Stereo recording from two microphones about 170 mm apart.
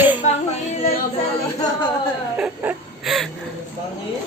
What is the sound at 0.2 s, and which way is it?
Music, 45° left (ahead or behind).